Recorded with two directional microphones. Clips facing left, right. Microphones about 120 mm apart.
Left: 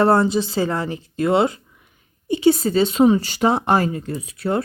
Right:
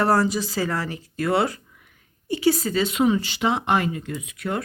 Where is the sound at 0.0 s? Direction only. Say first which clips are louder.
Left 4 dB; 25° left (ahead or behind).